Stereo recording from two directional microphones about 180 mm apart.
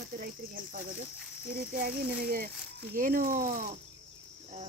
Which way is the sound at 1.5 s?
55° right (ahead or behind).